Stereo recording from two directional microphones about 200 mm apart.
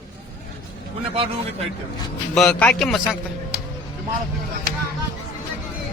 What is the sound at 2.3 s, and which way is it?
Speech, 5° left (ahead or behind).